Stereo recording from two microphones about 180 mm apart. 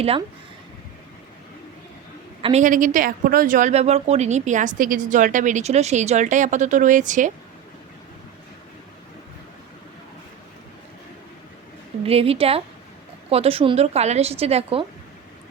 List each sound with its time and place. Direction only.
2.4 s a woman's voice: 40° right (ahead or behind)
12.0 s a woman's voice: 35° right (ahead or behind)